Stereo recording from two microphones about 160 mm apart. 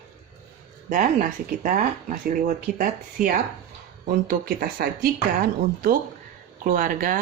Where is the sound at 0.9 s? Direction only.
55° right (ahead or behind).